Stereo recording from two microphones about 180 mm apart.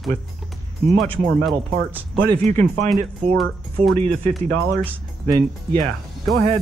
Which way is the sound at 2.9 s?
Centre (ahead or behind).